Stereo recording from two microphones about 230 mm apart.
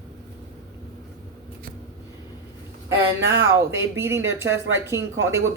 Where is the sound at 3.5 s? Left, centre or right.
Centre.